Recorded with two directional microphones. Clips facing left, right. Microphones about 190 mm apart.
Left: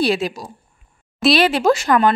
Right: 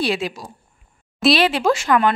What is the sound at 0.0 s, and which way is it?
Speech, 40° left (ahead or behind).